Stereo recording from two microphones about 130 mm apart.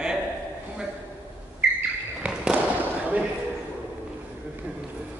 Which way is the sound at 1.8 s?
10° right (ahead or behind).